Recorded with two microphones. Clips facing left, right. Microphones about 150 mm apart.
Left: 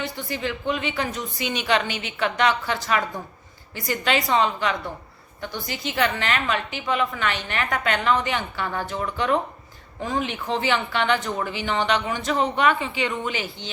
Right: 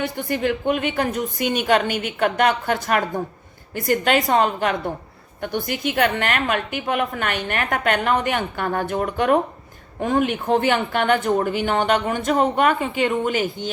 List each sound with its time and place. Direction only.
0.0 s a woman's voice: 55° right (ahead or behind)